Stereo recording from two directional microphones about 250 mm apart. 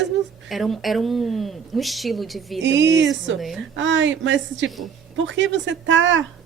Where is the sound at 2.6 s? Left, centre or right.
Right.